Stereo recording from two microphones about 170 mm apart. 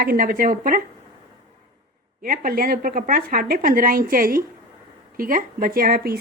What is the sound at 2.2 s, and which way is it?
Speech, 55° right (ahead or behind).